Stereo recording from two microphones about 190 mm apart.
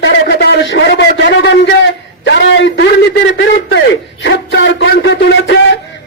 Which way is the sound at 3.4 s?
70° left (ahead or behind).